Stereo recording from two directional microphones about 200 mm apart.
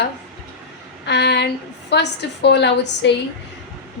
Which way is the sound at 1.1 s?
60° left (ahead or behind).